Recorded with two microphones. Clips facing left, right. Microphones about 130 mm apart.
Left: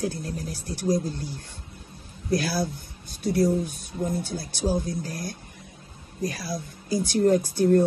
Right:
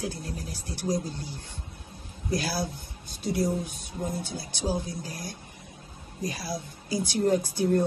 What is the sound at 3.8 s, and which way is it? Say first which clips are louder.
Speech: left 4 dB; 50° left (ahead or behind).